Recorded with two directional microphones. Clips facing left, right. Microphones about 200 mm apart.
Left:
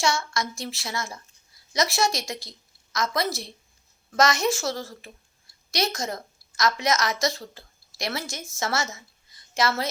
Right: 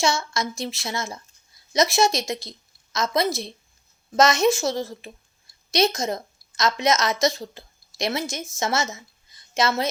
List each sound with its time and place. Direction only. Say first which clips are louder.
0.0 s a woman's voice: right 2 dB; 20° right (ahead or behind)